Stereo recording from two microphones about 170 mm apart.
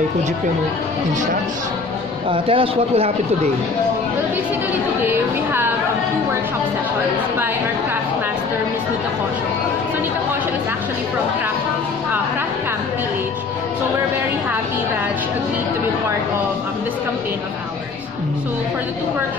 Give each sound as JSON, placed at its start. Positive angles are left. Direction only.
{"t": 2.3, "sound": "speech", "side_deg": -30}
{"t": 5.1, "sound": "a woman's voice", "side_deg": -15}